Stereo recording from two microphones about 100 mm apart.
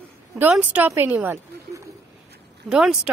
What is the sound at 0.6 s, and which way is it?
Speech, 15° right (ahead or behind).